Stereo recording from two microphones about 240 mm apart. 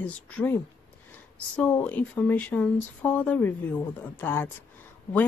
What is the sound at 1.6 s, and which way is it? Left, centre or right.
Speech, centre.